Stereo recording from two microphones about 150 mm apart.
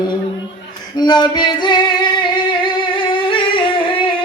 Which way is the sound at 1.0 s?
30° left (ahead or behind).